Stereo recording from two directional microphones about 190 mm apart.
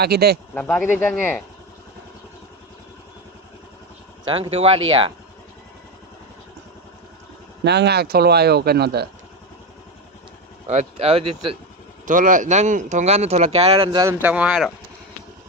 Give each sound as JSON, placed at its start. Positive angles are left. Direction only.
{"t": 0.0, "sound": "speech", "side_deg": -55}
{"t": 0.5, "sound": "speech", "side_deg": 5}
{"t": 4.3, "sound": "speech", "side_deg": -30}
{"t": 7.6, "sound": "speech", "side_deg": -60}
{"t": 10.7, "sound": "speech", "side_deg": -35}
{"t": 12.0, "sound": "speech", "side_deg": -45}
{"t": 14.0, "sound": "speech", "side_deg": -10}